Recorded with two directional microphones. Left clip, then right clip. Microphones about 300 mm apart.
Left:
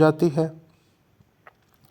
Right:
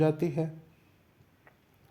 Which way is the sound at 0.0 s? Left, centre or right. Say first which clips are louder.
Left 9 dB; left.